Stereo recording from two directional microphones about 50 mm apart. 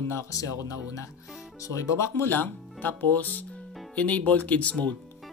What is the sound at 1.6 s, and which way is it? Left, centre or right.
Speech, left.